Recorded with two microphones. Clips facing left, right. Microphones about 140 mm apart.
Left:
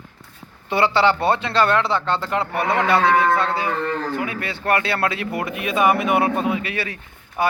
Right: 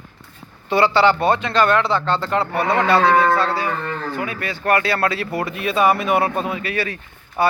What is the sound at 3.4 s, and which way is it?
Livestock, 20° left (ahead or behind).